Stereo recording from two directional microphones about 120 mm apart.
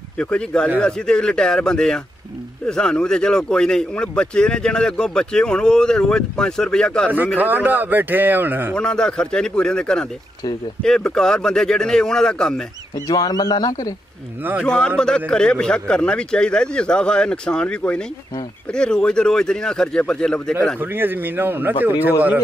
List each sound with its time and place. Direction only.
0.2 s speech: 10° left (ahead or behind)
7.3 s speech: 15° right (ahead or behind)
8.7 s speech: 5° left (ahead or behind)
13.1 s a man's voice: 30° left (ahead or behind)
14.6 s speech: 5° left (ahead or behind)
20.8 s speech: 15° right (ahead or behind)